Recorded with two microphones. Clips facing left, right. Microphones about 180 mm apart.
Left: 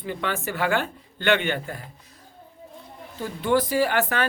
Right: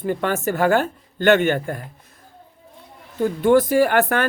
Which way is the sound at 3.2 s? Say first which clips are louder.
Right 7 dB; 50° right (ahead or behind).